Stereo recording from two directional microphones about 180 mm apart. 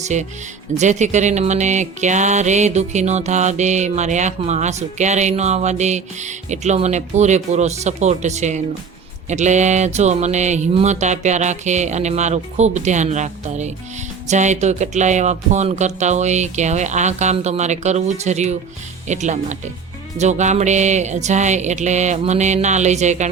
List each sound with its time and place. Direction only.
0.0 s speech: 40° right (ahead or behind)